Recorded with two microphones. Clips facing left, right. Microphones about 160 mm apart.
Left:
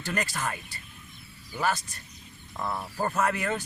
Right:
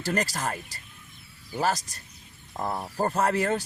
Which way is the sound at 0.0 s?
40° right (ahead or behind).